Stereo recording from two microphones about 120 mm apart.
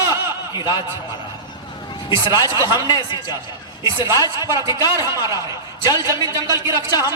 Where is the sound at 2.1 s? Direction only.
25° right (ahead or behind).